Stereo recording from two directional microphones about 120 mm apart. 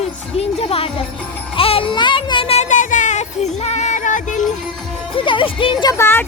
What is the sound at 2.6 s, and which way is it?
Music, 90° left.